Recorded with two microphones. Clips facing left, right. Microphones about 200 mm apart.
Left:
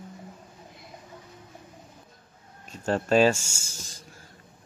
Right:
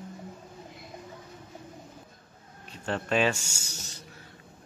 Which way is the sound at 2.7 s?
40° left (ahead or behind).